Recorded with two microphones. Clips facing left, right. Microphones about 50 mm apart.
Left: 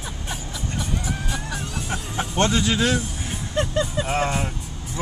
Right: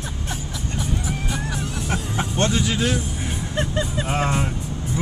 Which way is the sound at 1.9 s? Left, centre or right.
Centre.